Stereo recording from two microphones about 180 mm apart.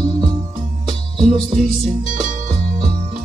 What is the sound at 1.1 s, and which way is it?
Music, 5° left (ahead or behind).